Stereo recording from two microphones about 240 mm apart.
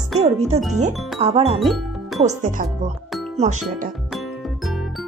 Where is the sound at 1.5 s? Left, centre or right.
Centre.